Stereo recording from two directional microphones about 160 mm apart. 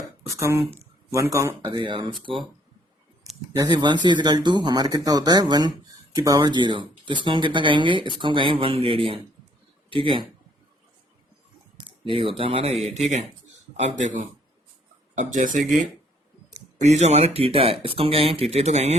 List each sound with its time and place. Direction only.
0.3 s speech: 20° right (ahead or behind)
1.7 s speech: 30° right (ahead or behind)
3.6 s speech: 25° right (ahead or behind)
12.0 s speech: 35° right (ahead or behind)
13.7 s speech: 45° right (ahead or behind)
16.8 s speech: 45° right (ahead or behind)